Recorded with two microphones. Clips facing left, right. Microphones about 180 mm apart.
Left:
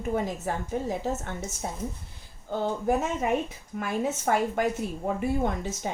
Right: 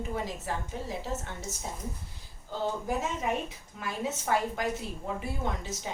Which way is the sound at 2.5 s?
55° left (ahead or behind).